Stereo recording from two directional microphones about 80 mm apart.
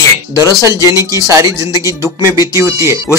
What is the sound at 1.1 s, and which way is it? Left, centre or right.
Speech, right.